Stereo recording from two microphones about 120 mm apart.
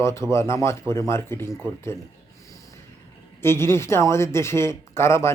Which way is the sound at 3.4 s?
20° left (ahead or behind).